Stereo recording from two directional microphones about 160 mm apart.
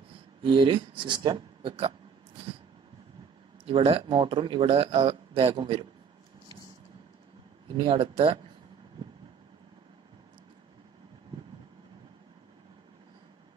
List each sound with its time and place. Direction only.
0.4 s speech: 30° right (ahead or behind)
3.6 s speech: 35° right (ahead or behind)
7.7 s speech: 30° right (ahead or behind)